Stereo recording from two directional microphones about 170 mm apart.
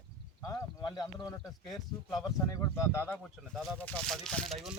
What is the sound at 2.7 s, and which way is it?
Speech, 15° left (ahead or behind).